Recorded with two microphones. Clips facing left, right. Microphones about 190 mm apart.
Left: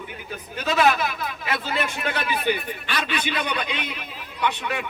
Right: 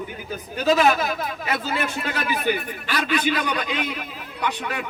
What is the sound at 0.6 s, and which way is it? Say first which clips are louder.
A man's voice: right 2 dB; 35° right (ahead or behind).